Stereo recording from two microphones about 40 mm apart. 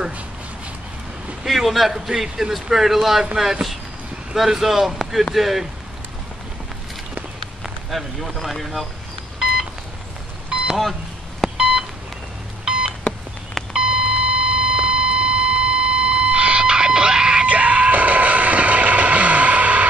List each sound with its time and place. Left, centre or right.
1.4 s a man's voice: centre
4.4 s a man's voice: centre
7.9 s speech: centre
10.7 s speech: centre
11.5 s telephone dialing: right
12.6 s beep: right
13.7 s alarm clock: right
17.5 s music: right